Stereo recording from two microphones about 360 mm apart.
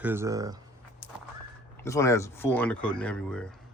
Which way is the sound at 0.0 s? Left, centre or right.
Centre.